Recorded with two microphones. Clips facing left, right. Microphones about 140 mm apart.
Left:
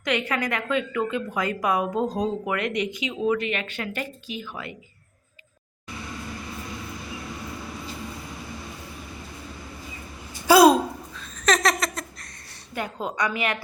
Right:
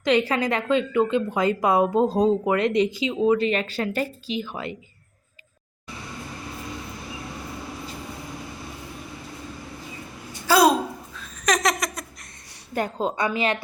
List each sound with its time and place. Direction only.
0.0 s a woman's voice: 30° right (ahead or behind)
4.3 s a woman's voice: 20° right (ahead or behind)
10.5 s a sound: 15° left (ahead or behind)
11.1 s laughter: 10° right (ahead or behind)
12.7 s a woman's voice: 40° right (ahead or behind)
13.1 s a woman's voice: 25° right (ahead or behind)